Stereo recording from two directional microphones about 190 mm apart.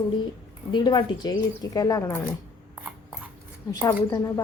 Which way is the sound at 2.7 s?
10° right (ahead or behind).